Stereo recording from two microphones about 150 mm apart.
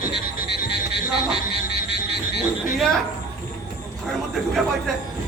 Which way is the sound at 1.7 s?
90° left.